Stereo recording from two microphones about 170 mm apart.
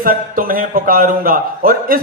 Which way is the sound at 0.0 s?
55° right (ahead or behind).